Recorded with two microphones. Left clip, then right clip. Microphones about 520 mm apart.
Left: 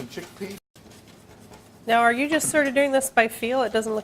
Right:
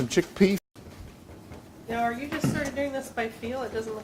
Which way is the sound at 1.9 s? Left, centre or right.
Left.